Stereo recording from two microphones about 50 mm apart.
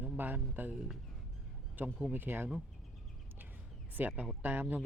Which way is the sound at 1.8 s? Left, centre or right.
Right.